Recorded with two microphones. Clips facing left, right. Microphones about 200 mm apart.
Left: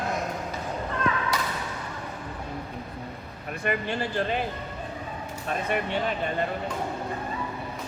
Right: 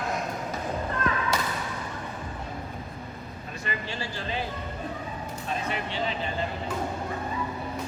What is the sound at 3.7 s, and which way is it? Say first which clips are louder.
Speech: left 7 dB; 60° left (ahead or behind).